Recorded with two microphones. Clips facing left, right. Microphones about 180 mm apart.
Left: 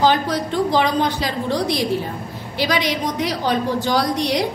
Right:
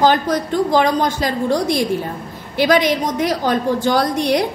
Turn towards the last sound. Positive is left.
turn(degrees=-50)  # may be behind; listen again after turning